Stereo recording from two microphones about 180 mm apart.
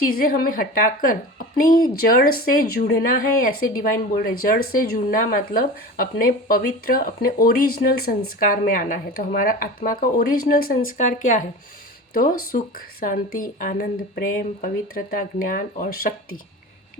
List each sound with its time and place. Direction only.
0.2 s speech: 55° left (ahead or behind)
12.1 s speech: 55° left (ahead or behind)